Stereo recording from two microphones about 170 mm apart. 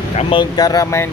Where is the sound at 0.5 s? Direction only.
20° left (ahead or behind).